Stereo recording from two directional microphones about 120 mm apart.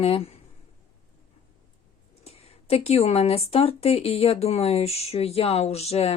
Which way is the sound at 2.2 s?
55° left (ahead or behind).